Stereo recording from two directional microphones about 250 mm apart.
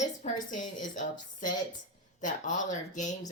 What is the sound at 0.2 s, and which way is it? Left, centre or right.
A woman's voice, left.